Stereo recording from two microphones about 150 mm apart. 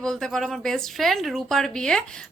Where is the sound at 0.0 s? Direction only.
5° left (ahead or behind).